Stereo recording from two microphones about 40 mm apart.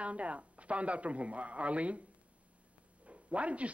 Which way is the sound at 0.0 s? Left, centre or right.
Right.